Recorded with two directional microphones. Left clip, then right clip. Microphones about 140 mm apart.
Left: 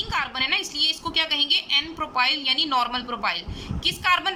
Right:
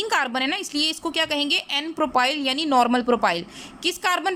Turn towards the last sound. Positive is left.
turn(degrees=-45)  # may be behind; listen again after turning